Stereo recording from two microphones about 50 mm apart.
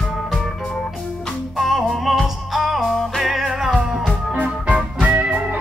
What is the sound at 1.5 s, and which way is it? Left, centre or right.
Music, centre.